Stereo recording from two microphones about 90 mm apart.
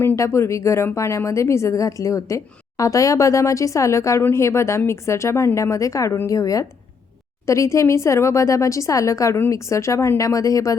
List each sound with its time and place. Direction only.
0.0 s a woman's voice: 25° left (ahead or behind)